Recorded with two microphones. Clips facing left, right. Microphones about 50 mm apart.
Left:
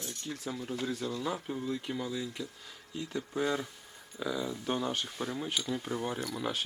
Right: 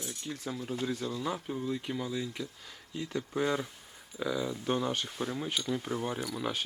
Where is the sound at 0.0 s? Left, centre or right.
Centre.